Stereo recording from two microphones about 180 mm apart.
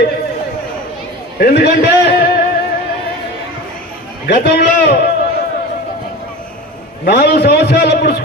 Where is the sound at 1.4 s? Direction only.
60° left (ahead or behind).